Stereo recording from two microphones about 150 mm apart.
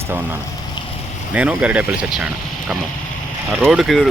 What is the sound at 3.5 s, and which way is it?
Speech, 5° right (ahead or behind).